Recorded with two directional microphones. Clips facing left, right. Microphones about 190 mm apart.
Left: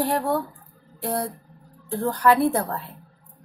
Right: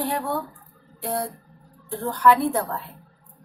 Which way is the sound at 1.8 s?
40° left (ahead or behind).